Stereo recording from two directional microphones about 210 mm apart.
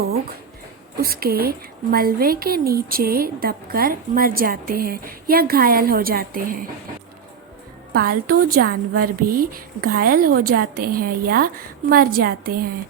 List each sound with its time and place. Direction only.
0.9 s a woman's voice: 45° right (ahead or behind)
7.9 s a woman's voice: 45° right (ahead or behind)